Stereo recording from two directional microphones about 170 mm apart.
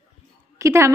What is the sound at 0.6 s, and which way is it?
Speech, 15° right (ahead or behind).